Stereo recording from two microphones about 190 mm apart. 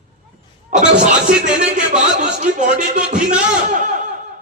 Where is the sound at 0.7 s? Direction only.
45° right (ahead or behind).